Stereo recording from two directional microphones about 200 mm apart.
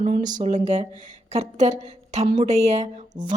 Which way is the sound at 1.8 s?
35° right (ahead or behind).